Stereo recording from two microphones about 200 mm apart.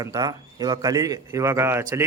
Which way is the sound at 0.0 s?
20° right (ahead or behind).